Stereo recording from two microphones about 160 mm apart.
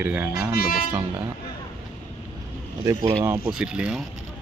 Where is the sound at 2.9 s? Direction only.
25° right (ahead or behind).